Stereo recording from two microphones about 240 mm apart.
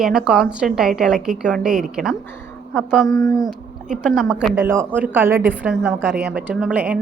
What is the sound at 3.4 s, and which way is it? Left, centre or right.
A woman's voice, centre.